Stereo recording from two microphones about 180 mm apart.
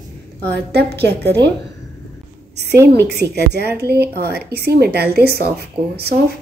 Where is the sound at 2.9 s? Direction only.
65° right (ahead or behind).